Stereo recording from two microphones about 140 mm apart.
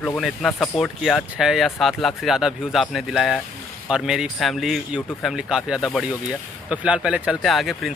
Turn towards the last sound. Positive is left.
turn(degrees=0)  # may be behind; listen again after turning